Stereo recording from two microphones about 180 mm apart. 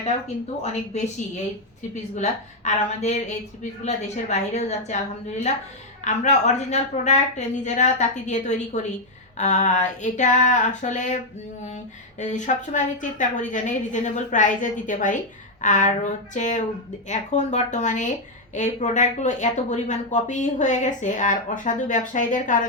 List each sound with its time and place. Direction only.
0.6 s speech: 40° left (ahead or behind)
2.1 s speech: 40° left (ahead or behind)
12.2 s speech: 45° left (ahead or behind)